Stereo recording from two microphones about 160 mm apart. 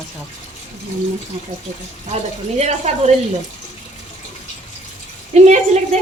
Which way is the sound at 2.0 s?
40° right (ahead or behind).